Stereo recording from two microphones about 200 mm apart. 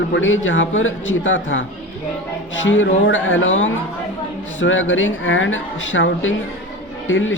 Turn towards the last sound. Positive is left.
turn(degrees=75)  # may be behind; listen again after turning